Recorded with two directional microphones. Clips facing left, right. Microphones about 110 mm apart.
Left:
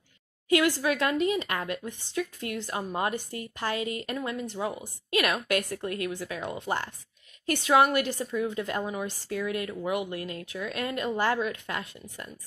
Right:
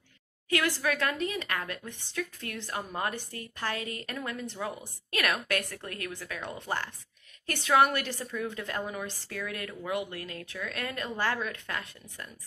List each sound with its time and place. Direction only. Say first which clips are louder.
0.5 s a woman's voice: left 5 dB; 20° left (ahead or behind)